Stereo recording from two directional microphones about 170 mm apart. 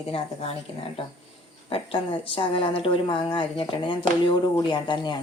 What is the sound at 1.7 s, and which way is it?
A woman's voice, 30° left (ahead or behind).